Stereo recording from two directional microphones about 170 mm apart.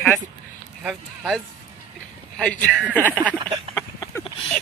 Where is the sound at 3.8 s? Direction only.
20° left (ahead or behind).